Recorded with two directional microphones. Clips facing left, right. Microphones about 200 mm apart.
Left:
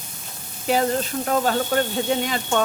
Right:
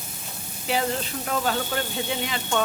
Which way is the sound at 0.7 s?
45° left (ahead or behind).